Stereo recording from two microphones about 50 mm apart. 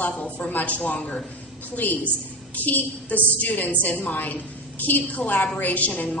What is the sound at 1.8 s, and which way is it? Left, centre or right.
A woman's voice, left.